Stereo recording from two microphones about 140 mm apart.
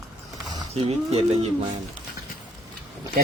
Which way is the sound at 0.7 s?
50° right (ahead or behind).